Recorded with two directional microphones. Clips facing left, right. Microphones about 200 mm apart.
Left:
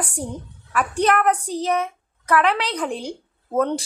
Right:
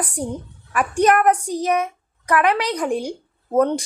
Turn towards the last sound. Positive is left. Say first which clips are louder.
# right 3 dB
turn(degrees=-15)  # may be behind; listen again after turning